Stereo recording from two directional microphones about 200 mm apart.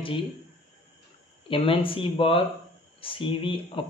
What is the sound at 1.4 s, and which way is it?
Speech, 25° left (ahead or behind).